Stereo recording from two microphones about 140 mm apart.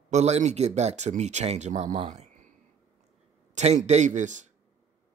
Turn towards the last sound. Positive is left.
turn(degrees=-60)  # may be behind; listen again after turning